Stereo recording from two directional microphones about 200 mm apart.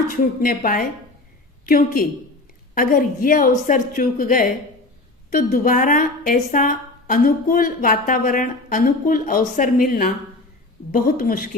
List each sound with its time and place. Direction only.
0.1 s a woman's voice: 45° left (ahead or behind)